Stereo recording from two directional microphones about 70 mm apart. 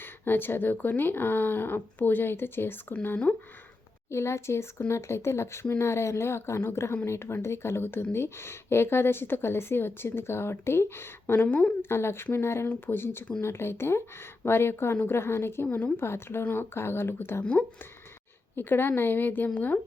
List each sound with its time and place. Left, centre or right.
0.0 s speech: left
4.1 s a woman's voice: left
17.4 s speech: centre
18.5 s speech: left